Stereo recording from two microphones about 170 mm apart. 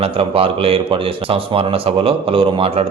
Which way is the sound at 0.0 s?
35° right (ahead or behind).